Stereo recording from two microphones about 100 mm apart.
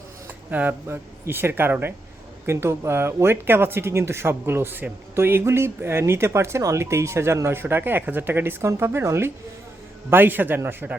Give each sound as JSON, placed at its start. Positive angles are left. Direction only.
{"t": 0.3, "sound": "speech", "side_deg": -15}